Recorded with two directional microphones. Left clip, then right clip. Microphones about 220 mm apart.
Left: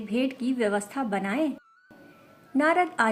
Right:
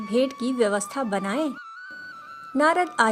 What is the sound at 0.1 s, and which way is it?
A woman's voice, 45° right (ahead or behind).